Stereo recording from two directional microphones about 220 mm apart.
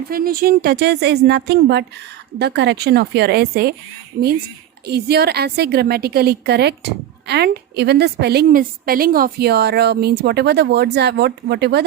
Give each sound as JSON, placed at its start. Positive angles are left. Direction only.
{"t": 0.1, "sound": "a woman's voice", "side_deg": -40}
{"t": 4.9, "sound": "a woman's voice", "side_deg": -45}